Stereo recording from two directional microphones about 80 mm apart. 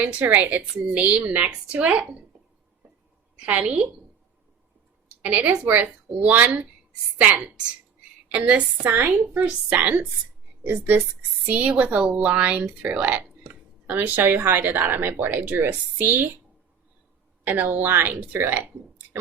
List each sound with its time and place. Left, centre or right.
0.0 s speech: centre
3.4 s speech: centre
5.2 s speech: centre
17.4 s speech: right